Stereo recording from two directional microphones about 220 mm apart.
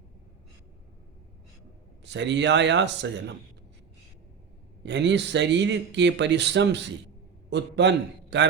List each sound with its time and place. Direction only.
2.0 s speech: 55° right (ahead or behind)
4.8 s speech: 55° right (ahead or behind)